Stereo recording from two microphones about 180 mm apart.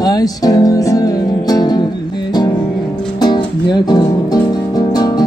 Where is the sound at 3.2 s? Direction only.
25° left (ahead or behind).